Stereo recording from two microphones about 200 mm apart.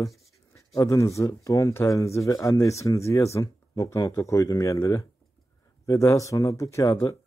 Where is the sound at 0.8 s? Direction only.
15° left (ahead or behind).